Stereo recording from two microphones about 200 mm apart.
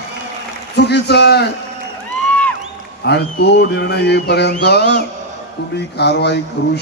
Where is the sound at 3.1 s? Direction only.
55° left (ahead or behind).